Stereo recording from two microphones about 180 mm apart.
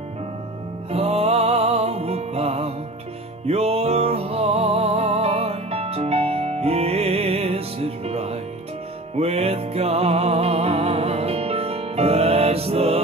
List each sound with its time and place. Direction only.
0.9 s music: 35° right (ahead or behind)